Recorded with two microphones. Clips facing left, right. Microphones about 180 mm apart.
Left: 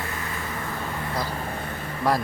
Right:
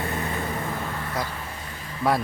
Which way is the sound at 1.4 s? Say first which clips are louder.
Left 6 dB; 60° left (ahead or behind).